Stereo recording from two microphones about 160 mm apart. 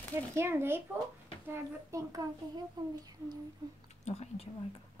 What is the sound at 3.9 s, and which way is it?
Speech, 45° left (ahead or behind).